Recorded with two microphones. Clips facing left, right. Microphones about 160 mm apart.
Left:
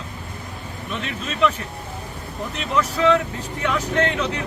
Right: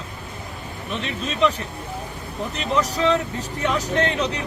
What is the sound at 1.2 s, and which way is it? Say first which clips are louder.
Speech: even; 20° right (ahead or behind).